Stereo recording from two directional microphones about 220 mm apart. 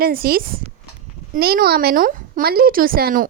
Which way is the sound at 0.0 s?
45° right (ahead or behind).